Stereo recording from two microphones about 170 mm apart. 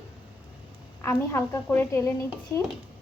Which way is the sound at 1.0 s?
15° left (ahead or behind).